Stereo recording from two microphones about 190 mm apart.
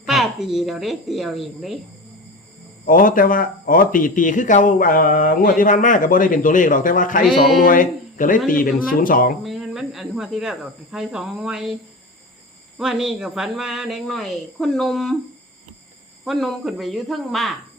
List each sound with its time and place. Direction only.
0.1 s speech: centre (ahead or behind)
2.8 s speech: 45° left (ahead or behind)
9.4 s speech: centre (ahead or behind)
12.8 s speech: centre (ahead or behind)
16.2 s speech: centre (ahead or behind)